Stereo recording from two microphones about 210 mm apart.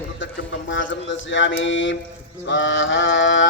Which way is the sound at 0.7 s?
60° left (ahead or behind).